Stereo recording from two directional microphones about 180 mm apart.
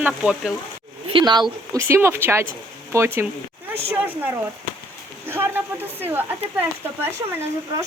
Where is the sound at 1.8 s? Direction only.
15° right (ahead or behind).